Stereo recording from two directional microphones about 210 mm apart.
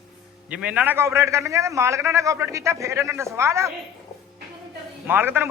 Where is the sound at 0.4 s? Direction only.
5° right (ahead or behind).